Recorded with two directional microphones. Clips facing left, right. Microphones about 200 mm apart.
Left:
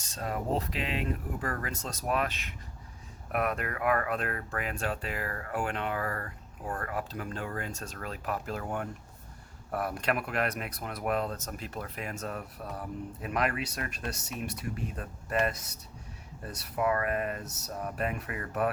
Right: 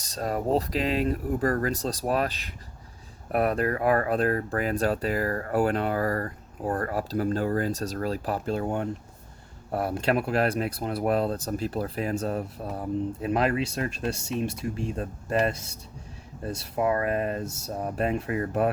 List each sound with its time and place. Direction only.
0.0 s speech: 40° right (ahead or behind)